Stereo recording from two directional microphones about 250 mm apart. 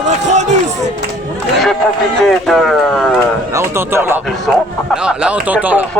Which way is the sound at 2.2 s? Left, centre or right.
Centre.